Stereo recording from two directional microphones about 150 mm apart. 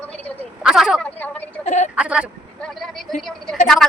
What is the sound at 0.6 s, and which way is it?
Speech, 5° right (ahead or behind).